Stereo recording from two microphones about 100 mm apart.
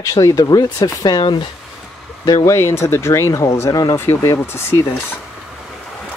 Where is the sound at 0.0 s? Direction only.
35° left (ahead or behind).